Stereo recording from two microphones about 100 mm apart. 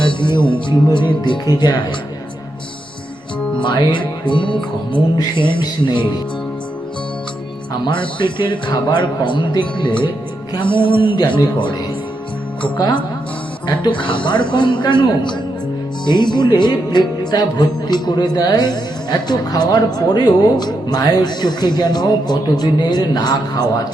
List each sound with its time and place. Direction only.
0.0 s speech: 55° left (ahead or behind)
3.6 s speech: 50° left (ahead or behind)
5.4 s music: 55° left (ahead or behind)
7.7 s speech: 55° left (ahead or behind)
10.6 s music: 55° left (ahead or behind)
12.6 s speech: 50° left (ahead or behind)
13.8 s music: 55° left (ahead or behind)
14.5 s speech: 50° left (ahead or behind)